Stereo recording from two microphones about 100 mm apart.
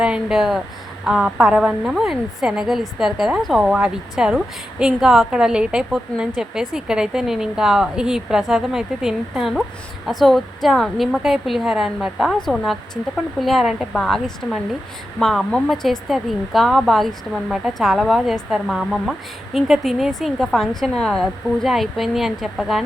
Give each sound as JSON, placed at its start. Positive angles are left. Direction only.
{"t": 0.0, "sound": "a woman's voice", "side_deg": -5}